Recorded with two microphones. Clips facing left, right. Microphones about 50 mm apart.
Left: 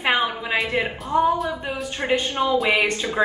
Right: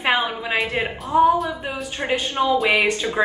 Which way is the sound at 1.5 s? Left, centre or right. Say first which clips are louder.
Even; right.